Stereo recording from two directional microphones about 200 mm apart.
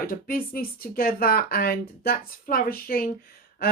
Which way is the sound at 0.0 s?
45° left (ahead or behind).